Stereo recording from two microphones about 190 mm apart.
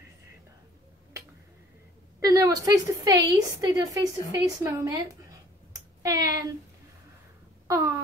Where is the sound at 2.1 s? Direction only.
15° right (ahead or behind).